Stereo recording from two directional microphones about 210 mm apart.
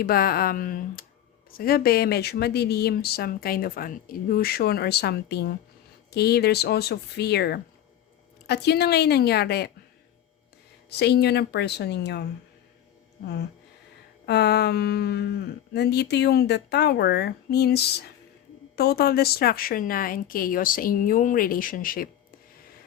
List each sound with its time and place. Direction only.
0.0 s speech: 45° left (ahead or behind)
10.8 s speech: 50° left (ahead or behind)
14.3 s speech: 50° left (ahead or behind)